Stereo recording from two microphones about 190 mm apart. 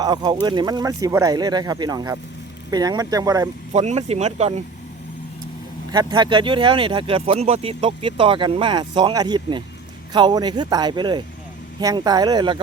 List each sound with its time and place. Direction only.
0.0 s speech: 20° right (ahead or behind)
3.7 s speech: 35° right (ahead or behind)
5.9 s speech: 25° right (ahead or behind)